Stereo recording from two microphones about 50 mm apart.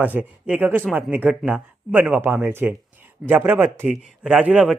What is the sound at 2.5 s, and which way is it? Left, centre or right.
Speech, right.